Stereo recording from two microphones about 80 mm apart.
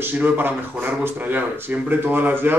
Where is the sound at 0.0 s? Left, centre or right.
Right.